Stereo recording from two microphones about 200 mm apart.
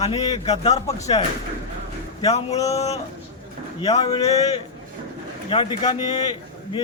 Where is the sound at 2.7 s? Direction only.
35° left (ahead or behind).